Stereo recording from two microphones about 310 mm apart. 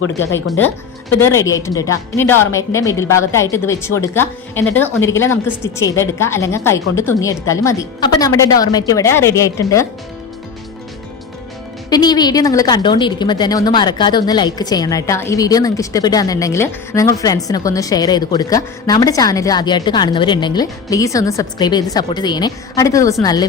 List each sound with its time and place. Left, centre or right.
1.2 s a woman's voice: centre
11.9 s a woman's voice: centre